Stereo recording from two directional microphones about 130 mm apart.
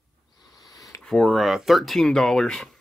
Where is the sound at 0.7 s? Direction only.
25° left (ahead or behind).